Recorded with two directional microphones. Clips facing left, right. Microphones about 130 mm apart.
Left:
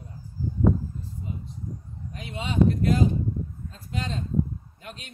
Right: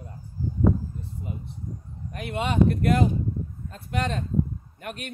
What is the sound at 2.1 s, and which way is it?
A man's voice, 60° right (ahead or behind).